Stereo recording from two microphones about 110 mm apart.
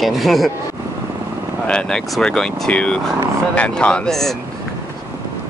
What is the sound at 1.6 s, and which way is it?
Speech, 10° left (ahead or behind).